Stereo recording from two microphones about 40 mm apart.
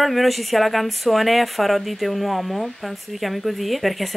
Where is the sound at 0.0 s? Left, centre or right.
Centre.